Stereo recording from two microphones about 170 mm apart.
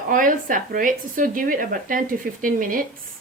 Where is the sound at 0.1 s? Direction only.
50° right (ahead or behind).